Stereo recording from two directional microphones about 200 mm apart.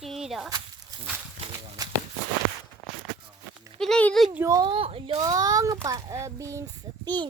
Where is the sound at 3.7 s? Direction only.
5° left (ahead or behind).